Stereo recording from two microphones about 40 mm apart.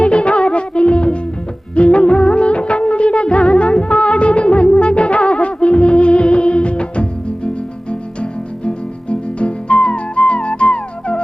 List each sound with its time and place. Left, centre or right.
0.0 s music of bollywood: left